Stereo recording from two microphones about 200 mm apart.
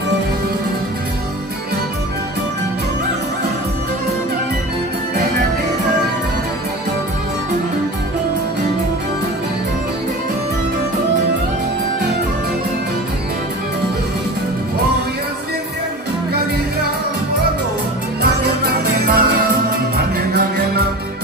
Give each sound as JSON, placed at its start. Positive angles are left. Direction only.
{"t": 18.7, "sound": "music", "side_deg": -50}